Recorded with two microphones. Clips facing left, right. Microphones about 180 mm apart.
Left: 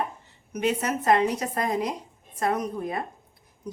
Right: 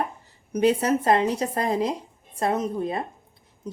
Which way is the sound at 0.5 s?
30° right (ahead or behind).